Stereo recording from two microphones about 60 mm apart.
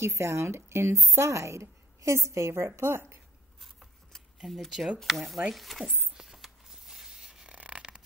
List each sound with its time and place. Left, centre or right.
0.0 s a woman's voice: right
4.5 s speech: centre
5.9 s a sound: right
6.1 s zipper: centre